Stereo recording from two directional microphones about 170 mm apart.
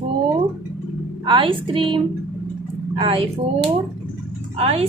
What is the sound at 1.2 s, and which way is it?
A woman's voice, 30° right (ahead or behind).